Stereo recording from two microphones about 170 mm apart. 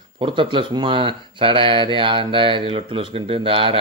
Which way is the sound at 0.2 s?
30° right (ahead or behind).